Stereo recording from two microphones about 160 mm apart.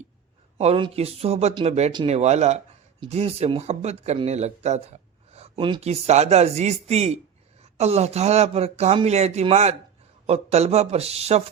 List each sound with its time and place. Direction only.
0.6 s speech: 40° right (ahead or behind)